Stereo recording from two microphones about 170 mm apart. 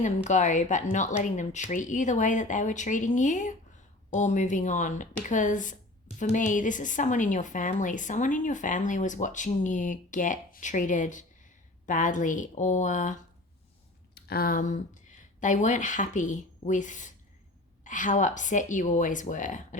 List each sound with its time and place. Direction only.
0.3 s a woman's voice: 45° left (ahead or behind)
14.2 s a woman's voice: 65° left (ahead or behind); by 19.6 s 50° left (ahead or behind)